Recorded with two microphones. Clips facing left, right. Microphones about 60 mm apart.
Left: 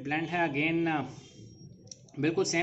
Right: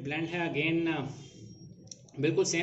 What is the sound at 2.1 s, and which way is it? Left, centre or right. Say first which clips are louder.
Speech: even; left.